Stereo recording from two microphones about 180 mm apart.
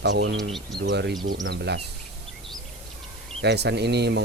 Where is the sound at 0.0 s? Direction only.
75° right (ahead or behind).